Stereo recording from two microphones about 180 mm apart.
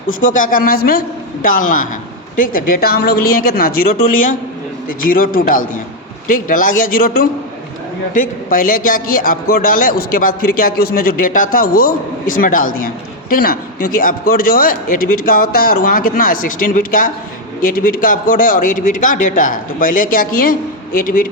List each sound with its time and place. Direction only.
0.1 s a man's voice: 45° left (ahead or behind)